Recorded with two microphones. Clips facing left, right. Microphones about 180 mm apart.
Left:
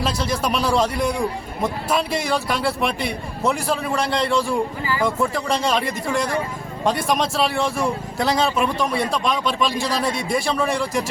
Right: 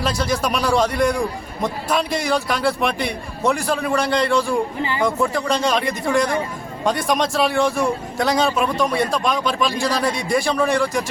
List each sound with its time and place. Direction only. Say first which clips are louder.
0.0 s a man's voice: right 1 dB; centre (ahead or behind)
4.8 s speech: right 1 dB; 25° right (ahead or behind)
5.0 s a man's voice: right 2 dB; 5° left (ahead or behind)